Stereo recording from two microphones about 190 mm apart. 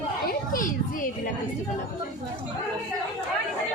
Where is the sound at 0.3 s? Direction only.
45° left (ahead or behind).